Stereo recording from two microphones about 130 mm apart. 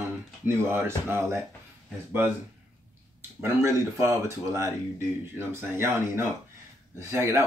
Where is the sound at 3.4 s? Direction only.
20° right (ahead or behind).